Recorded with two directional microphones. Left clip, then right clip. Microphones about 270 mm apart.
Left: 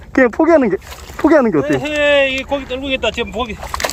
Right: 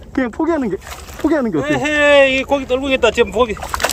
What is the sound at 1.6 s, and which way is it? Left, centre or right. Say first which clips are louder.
Speech: right 1 dB; centre.